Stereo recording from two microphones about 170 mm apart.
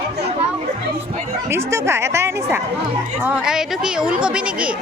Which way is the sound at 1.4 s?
15° right (ahead or behind).